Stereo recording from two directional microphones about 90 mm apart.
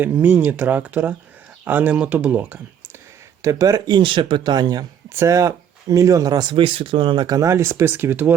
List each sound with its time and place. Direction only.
0.0 s speech: 20° right (ahead or behind)
3.4 s speech: 40° right (ahead or behind)
5.0 s speech: 30° right (ahead or behind); by 7.3 s 65° right (ahead or behind)
7.3 s speech: 40° right (ahead or behind); by 8.3 s 20° right (ahead or behind)